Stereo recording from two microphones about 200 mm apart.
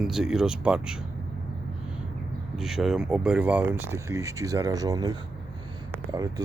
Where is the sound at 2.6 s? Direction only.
Centre (ahead or behind).